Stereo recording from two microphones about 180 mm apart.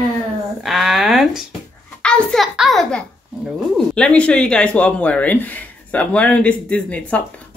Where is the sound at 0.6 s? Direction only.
Centre (ahead or behind).